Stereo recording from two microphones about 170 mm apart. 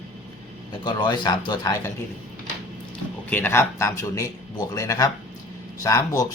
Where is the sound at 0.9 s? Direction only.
25° left (ahead or behind).